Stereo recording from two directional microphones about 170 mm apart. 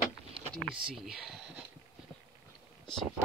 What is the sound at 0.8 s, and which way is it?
Speech, 5° right (ahead or behind).